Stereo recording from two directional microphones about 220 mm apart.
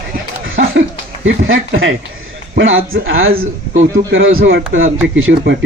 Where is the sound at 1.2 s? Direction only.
60° right (ahead or behind).